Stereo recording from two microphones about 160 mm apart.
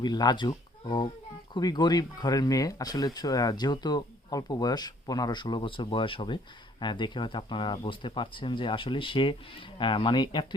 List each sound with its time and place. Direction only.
0.0 s speech: 25° left (ahead or behind)